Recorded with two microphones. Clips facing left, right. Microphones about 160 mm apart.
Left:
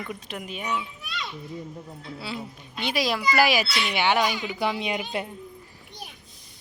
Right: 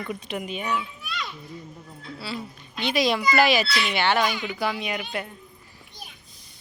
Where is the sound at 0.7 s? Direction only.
20° left (ahead or behind).